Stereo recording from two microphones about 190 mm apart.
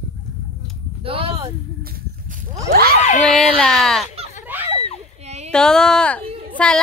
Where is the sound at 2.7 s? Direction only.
50° right (ahead or behind).